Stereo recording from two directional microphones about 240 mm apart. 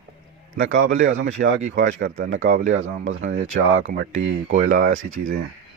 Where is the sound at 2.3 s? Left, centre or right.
Right.